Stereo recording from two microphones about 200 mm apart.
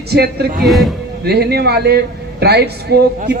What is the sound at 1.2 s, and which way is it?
A woman's voice, 55° right (ahead or behind).